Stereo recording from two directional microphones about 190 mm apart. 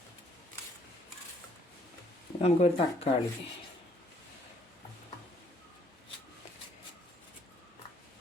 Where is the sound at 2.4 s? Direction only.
30° left (ahead or behind).